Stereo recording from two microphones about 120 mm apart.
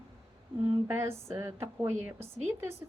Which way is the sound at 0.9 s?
20° right (ahead or behind).